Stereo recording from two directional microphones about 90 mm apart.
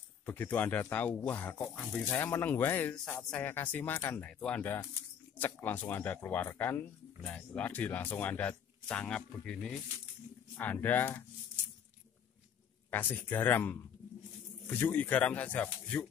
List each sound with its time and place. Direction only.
0.2 s speech: 25° left (ahead or behind)
2.0 s speech: 25° left (ahead or behind)
4.2 s speech: 15° left (ahead or behind)
10.6 s speech: 20° left (ahead or behind)
12.9 s speech: 20° left (ahead or behind)